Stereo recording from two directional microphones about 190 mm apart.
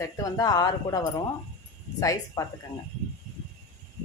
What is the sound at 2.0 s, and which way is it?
Speech, 20° left (ahead or behind).